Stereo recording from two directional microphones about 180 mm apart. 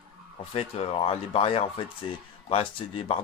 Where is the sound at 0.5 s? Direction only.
35° left (ahead or behind).